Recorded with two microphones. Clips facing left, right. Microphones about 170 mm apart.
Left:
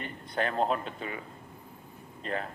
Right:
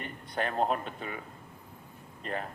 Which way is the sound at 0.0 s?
35° left (ahead or behind).